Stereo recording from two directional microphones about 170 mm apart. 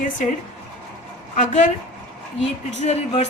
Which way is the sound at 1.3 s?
45° left (ahead or behind).